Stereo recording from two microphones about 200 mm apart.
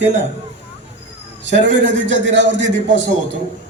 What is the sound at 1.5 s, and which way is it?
A man's voice, 65° right (ahead or behind).